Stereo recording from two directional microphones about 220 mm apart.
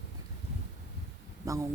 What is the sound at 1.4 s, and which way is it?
Speech, 15° right (ahead or behind).